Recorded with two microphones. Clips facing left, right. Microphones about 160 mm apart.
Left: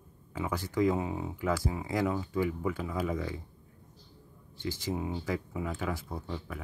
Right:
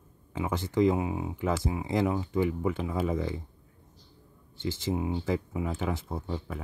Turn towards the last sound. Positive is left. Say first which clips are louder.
# right 4 dB
turn(degrees=-25)  # may be behind; listen again after turning